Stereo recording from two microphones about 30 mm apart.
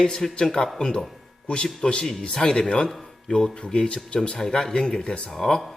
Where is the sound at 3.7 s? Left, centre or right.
Left.